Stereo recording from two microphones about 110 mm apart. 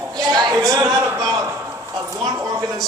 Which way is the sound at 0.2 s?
40° right (ahead or behind).